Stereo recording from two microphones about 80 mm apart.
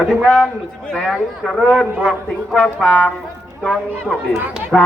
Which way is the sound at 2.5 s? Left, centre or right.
Centre.